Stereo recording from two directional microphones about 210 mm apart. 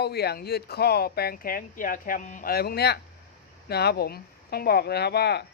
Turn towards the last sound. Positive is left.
turn(degrees=50)  # may be behind; listen again after turning